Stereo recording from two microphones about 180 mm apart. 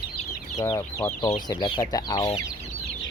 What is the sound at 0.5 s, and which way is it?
Speech, 20° left (ahead or behind).